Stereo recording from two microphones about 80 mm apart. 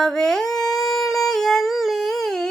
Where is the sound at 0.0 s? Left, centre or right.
Centre.